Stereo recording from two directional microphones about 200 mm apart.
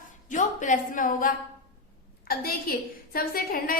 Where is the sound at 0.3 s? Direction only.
40° left (ahead or behind).